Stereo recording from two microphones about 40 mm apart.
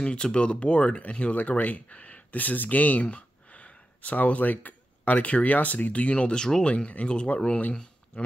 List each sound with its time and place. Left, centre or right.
0.0 s speech: left
6.3 s speech: centre
6.9 s speech: left